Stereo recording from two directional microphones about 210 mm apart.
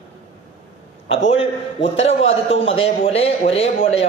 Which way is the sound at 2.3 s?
30° left (ahead or behind).